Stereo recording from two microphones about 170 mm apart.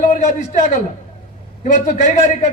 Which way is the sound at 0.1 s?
45° left (ahead or behind).